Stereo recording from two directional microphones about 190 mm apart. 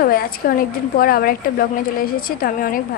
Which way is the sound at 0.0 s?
50° left (ahead or behind).